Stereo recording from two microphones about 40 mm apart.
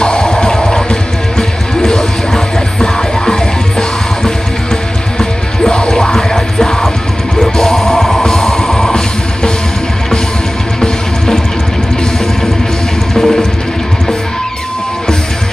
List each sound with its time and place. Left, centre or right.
0.0 s music: left
5.7 s music: left
10.8 s music: centre
13.1 s music: centre